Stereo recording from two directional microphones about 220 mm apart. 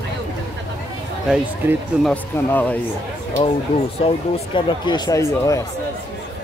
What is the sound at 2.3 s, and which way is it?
Speech, 5° left (ahead or behind).